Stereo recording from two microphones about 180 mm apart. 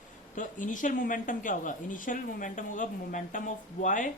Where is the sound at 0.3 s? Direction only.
45° left (ahead or behind).